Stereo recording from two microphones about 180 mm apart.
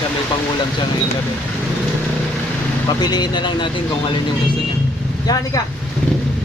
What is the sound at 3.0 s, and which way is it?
Speech, 25° left (ahead or behind).